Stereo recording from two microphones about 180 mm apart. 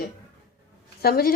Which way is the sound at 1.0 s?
55° left (ahead or behind).